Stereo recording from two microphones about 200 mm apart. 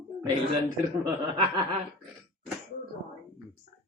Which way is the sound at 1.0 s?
25° right (ahead or behind).